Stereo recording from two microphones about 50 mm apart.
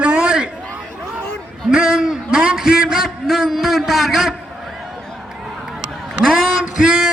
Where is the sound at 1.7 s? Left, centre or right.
Centre.